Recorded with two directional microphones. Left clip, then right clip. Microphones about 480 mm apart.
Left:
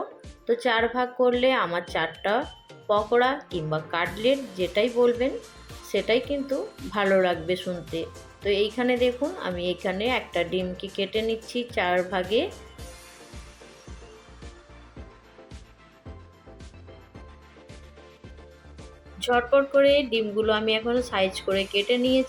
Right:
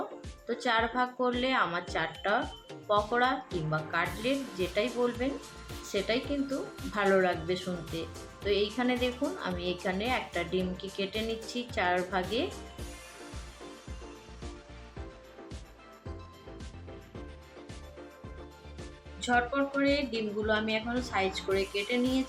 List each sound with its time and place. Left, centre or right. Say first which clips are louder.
0.4 s speech: left 6 dB; centre
18.8 s speech: left 6 dB; centre